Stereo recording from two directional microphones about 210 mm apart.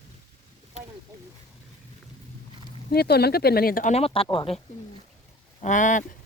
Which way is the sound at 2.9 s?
50° left (ahead or behind).